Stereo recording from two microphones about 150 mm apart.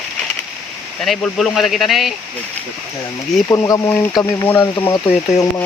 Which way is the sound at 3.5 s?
25° left (ahead or behind).